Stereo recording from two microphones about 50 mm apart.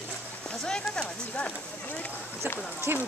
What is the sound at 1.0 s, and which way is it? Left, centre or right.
Speech, left.